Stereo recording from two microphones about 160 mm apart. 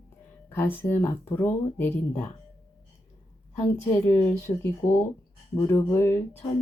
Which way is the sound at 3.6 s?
20° left (ahead or behind).